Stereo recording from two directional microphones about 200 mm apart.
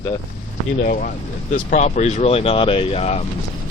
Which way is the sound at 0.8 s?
40° left (ahead or behind).